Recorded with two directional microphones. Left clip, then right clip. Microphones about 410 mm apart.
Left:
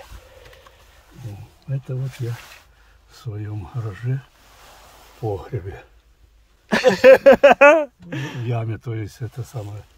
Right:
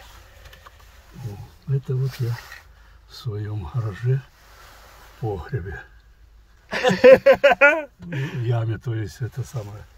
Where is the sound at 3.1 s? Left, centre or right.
Centre.